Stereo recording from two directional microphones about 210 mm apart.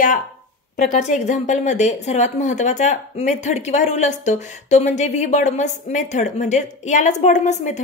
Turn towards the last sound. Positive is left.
turn(degrees=35)  # may be behind; listen again after turning